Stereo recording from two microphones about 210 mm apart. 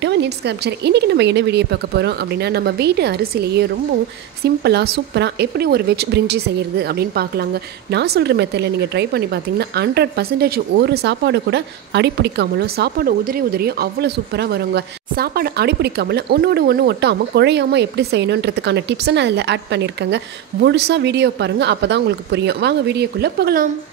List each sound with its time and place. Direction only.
0.0 s a woman's voice: 55° right (ahead or behind)